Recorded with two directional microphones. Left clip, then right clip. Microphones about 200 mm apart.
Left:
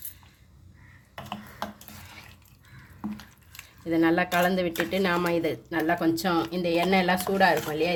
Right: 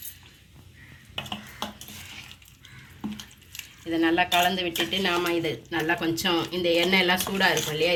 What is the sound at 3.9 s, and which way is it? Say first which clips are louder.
Speech: right 1 dB; 55° left (ahead or behind).